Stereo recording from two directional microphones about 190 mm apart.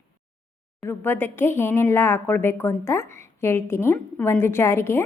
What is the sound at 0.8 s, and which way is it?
Speech, 10° left (ahead or behind).